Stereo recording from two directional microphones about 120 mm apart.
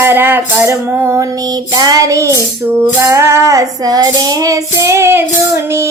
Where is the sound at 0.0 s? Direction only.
20° right (ahead or behind).